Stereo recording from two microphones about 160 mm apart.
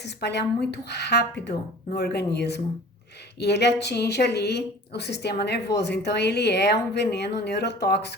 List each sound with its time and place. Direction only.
0.2 s speech: 90° left